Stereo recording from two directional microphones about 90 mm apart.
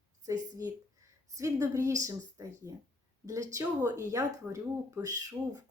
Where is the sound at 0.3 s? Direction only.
40° right (ahead or behind).